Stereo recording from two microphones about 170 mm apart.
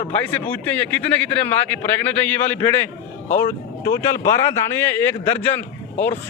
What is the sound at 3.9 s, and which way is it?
Speech, 15° left (ahead or behind).